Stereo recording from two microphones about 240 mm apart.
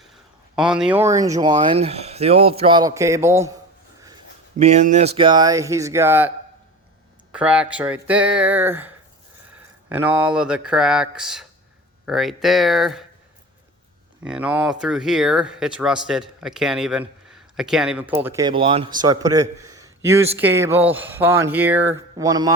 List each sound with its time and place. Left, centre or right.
0.5 s speech: centre
4.5 s speech: right; by 6.3 s centre
7.3 s speech: centre
9.9 s speech: centre
14.3 s speech: centre